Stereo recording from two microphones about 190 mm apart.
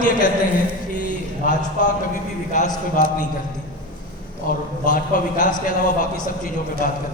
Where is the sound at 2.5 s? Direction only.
40° left (ahead or behind).